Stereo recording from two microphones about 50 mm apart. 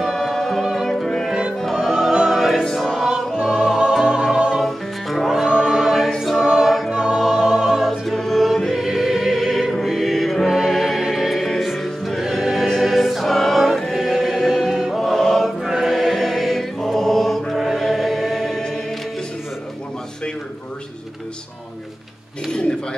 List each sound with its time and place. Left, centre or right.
0.1 s music: centre
2.8 s choir: centre
3.1 s music: centre
4.6 s music: centre
5.3 s choir: centre
6.9 s choir: centre
7.2 s music: centre
7.8 s choir: centre
8.7 s music: centre
10.4 s music: centre
15.0 s chant: centre
15.6 s choir: centre
22.5 s a sound: centre